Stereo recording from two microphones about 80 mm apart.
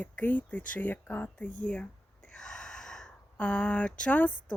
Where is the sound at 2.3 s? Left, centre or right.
Centre.